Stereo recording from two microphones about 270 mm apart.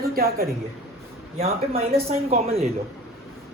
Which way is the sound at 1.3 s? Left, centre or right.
Right.